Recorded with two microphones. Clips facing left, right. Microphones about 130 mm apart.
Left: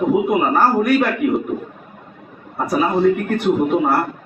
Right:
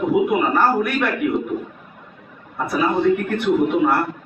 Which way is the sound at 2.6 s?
40° left (ahead or behind).